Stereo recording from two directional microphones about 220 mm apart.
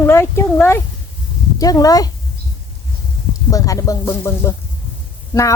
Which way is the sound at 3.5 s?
15° left (ahead or behind).